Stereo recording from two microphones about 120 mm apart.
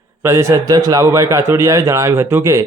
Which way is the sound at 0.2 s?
25° right (ahead or behind).